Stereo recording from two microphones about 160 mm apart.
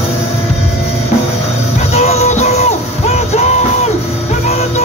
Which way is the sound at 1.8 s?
40° left (ahead or behind).